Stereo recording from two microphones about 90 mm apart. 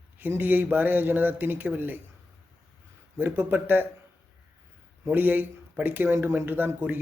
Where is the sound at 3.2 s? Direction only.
20° right (ahead or behind).